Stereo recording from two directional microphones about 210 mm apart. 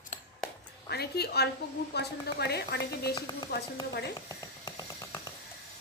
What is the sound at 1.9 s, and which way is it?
Speech, 50° left (ahead or behind).